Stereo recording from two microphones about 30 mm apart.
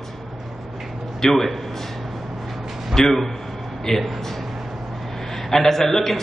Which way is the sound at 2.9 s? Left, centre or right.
Centre.